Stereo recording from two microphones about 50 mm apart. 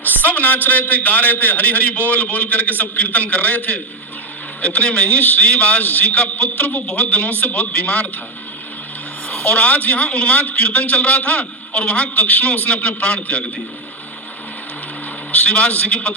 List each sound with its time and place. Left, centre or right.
0.3 s a man's voice: left
9.3 s a man's voice: left
15.3 s a man's voice: left